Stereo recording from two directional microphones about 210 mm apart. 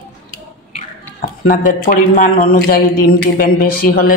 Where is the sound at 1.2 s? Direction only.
40° left (ahead or behind).